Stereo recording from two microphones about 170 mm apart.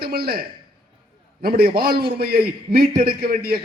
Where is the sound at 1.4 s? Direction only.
65° right (ahead or behind).